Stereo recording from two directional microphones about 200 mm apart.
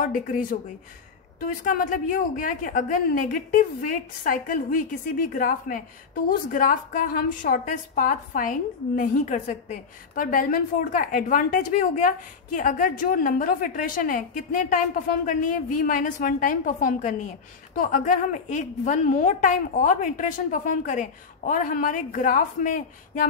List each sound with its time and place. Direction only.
0.0 s a woman's voice: 40° left (ahead or behind)